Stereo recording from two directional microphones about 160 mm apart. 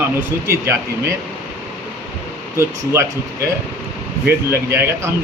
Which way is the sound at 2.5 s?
20° right (ahead or behind).